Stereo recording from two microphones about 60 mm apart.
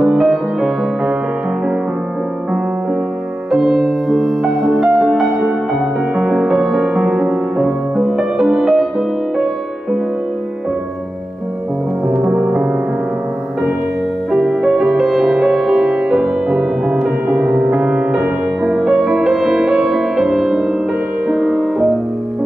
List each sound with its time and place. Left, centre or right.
0.0 s music: centre
3.5 s music: centre
6.5 s music: centre
6.9 s music: centre
7.6 s music: centre
12.1 s music: centre
14.3 s music: centre
18.8 s music: centre